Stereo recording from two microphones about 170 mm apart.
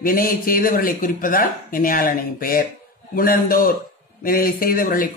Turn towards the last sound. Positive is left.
turn(degrees=55)  # may be behind; listen again after turning